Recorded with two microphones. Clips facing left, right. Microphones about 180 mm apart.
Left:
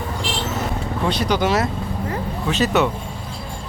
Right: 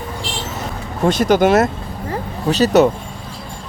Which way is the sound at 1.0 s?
45° right (ahead or behind).